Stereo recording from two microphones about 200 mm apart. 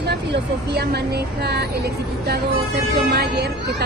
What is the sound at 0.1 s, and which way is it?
Speech, 55° right (ahead or behind).